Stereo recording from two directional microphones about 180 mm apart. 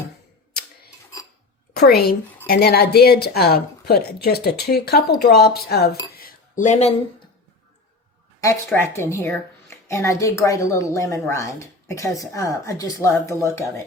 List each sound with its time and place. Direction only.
1.7 s a woman's voice: 60° left (ahead or behind); by 6.9 s 40° left (ahead or behind)
8.4 s a woman's voice: 15° left (ahead or behind)